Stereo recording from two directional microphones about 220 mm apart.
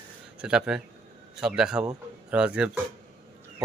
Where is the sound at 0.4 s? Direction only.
5° right (ahead or behind).